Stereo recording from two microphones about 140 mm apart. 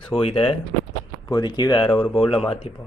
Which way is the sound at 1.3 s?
30° left (ahead or behind).